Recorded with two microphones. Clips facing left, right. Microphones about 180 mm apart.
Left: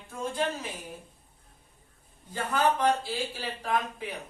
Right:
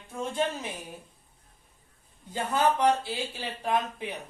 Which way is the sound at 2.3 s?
20° right (ahead or behind).